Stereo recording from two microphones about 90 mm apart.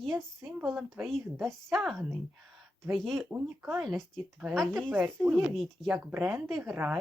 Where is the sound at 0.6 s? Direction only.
Centre (ahead or behind).